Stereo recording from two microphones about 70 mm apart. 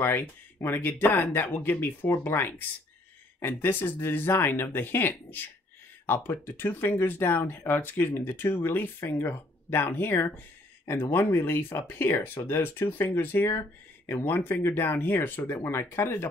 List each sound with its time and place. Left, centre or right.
0.0 s speech: left